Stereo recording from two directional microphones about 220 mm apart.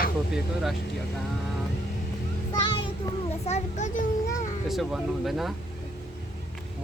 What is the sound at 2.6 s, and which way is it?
A child's voice, 20° left (ahead or behind).